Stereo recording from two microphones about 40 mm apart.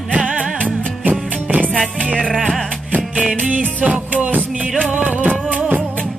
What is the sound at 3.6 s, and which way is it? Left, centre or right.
Music, right.